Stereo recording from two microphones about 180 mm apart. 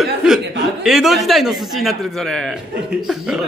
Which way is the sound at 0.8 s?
Centre (ahead or behind).